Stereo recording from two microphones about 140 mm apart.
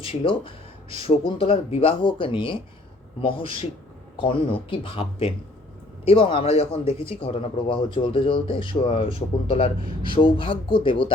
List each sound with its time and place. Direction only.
0.0 s speech: 40° left (ahead or behind)
4.7 s speech: 40° left (ahead or behind)